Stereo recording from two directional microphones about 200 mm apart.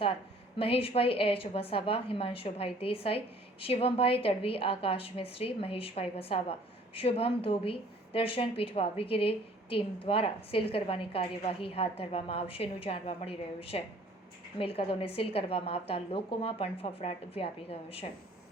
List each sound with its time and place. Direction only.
0.6 s a woman's voice: 30° left (ahead or behind)